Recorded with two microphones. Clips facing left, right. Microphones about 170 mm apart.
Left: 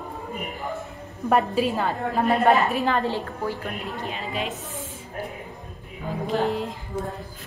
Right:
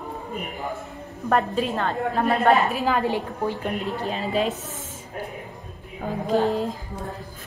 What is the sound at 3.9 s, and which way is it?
Speech, 35° right (ahead or behind).